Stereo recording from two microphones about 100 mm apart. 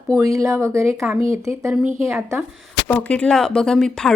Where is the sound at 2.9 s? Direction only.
15° left (ahead or behind).